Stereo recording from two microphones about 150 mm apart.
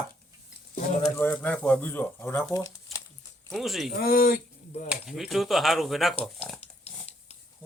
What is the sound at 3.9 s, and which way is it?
Speech, 80° left.